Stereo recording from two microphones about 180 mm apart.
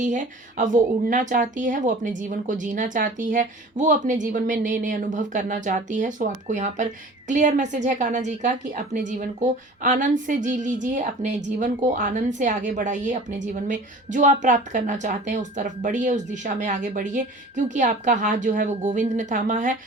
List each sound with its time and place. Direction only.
0.0 s a woman's voice: 45° right (ahead or behind)